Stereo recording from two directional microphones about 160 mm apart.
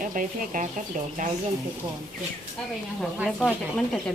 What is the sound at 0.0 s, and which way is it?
Speech, 55° right (ahead or behind).